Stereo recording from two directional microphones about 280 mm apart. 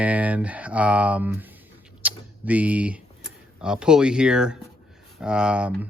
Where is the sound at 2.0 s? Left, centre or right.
Centre.